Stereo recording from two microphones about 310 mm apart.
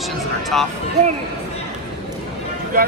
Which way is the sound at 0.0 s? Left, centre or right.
Centre.